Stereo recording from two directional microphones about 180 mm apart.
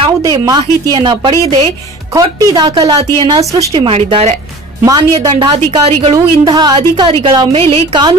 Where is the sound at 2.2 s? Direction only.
20° right (ahead or behind).